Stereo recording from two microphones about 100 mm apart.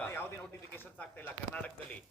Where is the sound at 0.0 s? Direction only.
20° left (ahead or behind).